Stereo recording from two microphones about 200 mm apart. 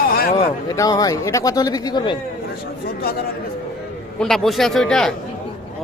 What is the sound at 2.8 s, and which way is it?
Speech, 50° left (ahead or behind).